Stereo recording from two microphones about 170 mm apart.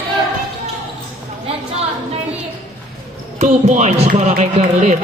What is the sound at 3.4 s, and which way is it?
Speech, 40° right (ahead or behind).